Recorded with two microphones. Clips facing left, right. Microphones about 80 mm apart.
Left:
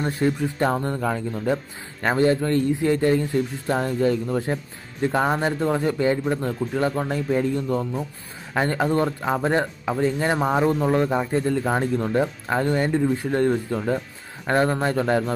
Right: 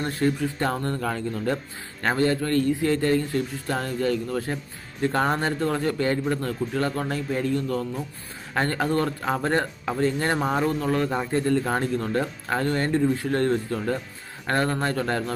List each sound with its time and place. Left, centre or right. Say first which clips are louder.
0.0 s a man's voice: left 2 dB; centre